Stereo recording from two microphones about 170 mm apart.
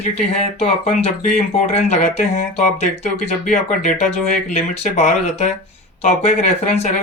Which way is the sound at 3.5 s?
45° left (ahead or behind).